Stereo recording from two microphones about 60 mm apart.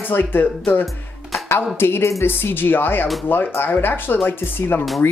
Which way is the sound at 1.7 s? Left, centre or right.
Left.